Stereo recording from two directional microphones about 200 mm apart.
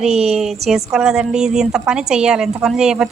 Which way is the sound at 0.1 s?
30° right (ahead or behind).